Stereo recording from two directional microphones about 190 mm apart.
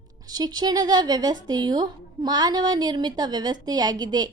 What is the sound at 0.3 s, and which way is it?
Speech, 20° right (ahead or behind).